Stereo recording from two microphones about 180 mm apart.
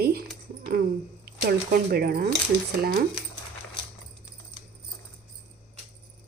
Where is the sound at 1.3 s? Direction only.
60° right (ahead or behind).